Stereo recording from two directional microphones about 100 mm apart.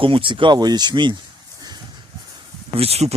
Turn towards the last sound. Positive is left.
turn(degrees=-85)